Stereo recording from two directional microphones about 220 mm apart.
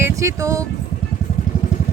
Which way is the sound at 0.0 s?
15° right (ahead or behind).